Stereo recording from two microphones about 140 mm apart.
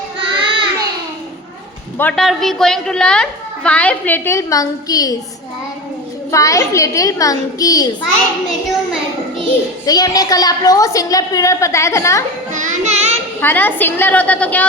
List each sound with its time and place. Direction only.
0.2 s child singing: 40° right (ahead or behind)
2.1 s a woman's voice: centre (ahead or behind); by 5.1 s 25° left (ahead or behind)
6.3 s a woman's voice: 25° left (ahead or behind)
9.8 s a woman's voice: 30° left (ahead or behind)
12.5 s music: 55° right (ahead or behind)
13.4 s a woman's voice: 15° left (ahead or behind)